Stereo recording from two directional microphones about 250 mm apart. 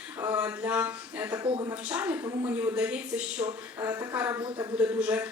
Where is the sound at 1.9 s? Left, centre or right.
Centre.